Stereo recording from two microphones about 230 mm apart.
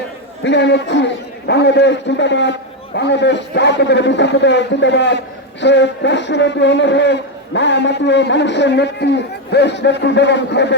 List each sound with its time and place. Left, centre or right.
0.4 s a man's voice: left